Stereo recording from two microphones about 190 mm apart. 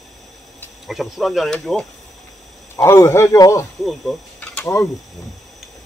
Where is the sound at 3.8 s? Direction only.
Centre (ahead or behind).